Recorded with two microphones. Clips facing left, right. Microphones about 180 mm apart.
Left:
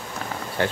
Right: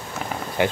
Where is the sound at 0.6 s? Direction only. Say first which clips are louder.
Right 3 dB; 15° right (ahead or behind).